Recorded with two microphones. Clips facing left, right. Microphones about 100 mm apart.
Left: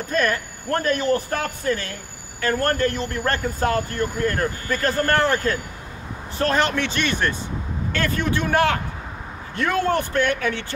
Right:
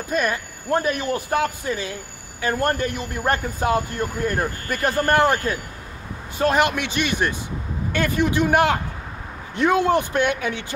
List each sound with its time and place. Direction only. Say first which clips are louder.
0.1 s speech: left 1 dB; 15° right (ahead or behind)